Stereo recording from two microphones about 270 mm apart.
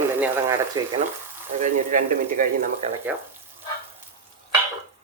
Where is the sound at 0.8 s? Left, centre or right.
Centre.